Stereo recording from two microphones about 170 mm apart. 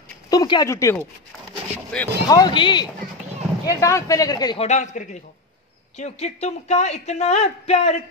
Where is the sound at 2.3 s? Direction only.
25° left (ahead or behind).